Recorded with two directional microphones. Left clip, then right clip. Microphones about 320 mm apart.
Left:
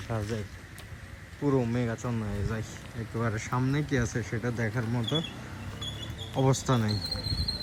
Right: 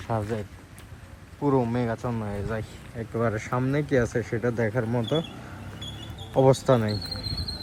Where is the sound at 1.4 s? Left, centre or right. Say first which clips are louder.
Right 4 dB; right.